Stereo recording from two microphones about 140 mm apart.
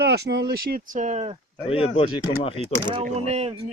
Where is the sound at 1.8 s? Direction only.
40° left (ahead or behind).